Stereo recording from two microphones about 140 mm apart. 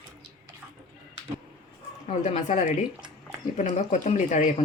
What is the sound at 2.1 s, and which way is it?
Speech, 55° left (ahead or behind).